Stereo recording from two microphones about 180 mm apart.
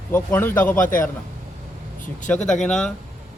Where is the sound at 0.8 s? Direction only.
50° left (ahead or behind).